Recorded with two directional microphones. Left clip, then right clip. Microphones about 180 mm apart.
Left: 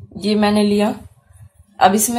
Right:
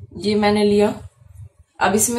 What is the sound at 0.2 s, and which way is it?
A woman's voice, 45° left (ahead or behind).